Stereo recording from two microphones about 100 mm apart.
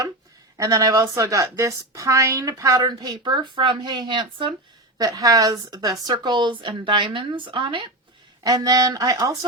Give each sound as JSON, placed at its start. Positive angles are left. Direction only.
{"t": 0.5, "sound": "a woman's voice", "side_deg": -35}
{"t": 4.9, "sound": "speech", "side_deg": -35}
{"t": 8.4, "sound": "a woman's voice", "side_deg": -35}